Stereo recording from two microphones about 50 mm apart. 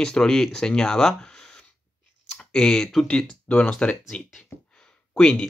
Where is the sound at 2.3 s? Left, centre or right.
Centre.